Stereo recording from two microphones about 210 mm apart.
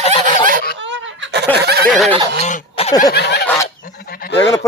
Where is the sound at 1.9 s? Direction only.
Centre (ahead or behind).